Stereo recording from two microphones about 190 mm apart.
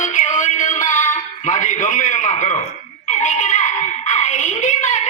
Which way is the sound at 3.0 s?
40° left (ahead or behind).